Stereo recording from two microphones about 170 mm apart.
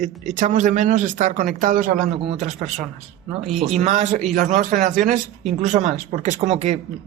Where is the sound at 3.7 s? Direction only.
45° right (ahead or behind).